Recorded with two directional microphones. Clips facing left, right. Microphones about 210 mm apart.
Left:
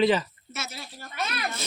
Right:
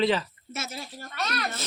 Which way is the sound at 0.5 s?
50° right (ahead or behind).